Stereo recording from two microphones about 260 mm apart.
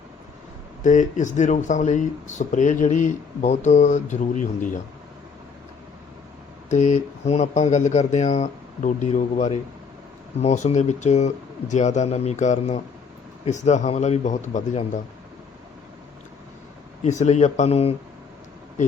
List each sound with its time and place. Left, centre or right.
0.8 s speech: left
6.7 s speech: left
17.0 s speech: left